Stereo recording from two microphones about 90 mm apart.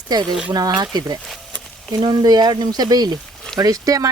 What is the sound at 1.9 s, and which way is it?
Speech, 50° right (ahead or behind).